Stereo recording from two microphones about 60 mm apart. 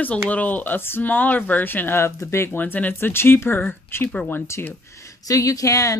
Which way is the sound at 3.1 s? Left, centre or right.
Left.